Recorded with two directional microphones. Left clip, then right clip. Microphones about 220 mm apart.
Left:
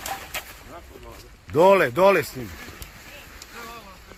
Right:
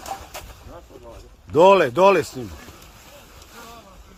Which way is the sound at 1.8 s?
30° right (ahead or behind).